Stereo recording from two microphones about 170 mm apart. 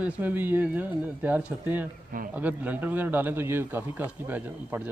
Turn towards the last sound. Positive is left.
turn(degrees=-10)  # may be behind; listen again after turning